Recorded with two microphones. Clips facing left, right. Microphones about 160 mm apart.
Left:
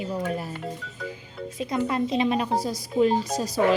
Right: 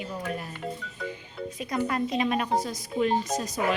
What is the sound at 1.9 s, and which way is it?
A woman's voice, 25° left (ahead or behind).